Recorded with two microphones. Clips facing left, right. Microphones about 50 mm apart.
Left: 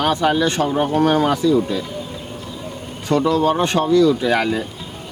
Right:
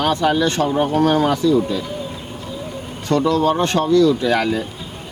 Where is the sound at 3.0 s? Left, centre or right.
Centre.